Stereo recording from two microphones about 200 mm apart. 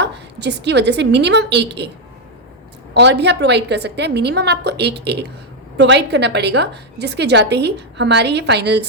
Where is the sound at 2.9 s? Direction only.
60° right (ahead or behind).